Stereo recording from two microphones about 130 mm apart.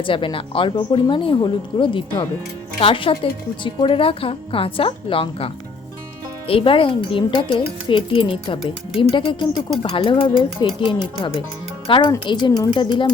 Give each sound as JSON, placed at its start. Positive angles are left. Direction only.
{"t": 0.0, "sound": "a woman's voice", "side_deg": 40}
{"t": 6.5, "sound": "a woman's voice", "side_deg": 45}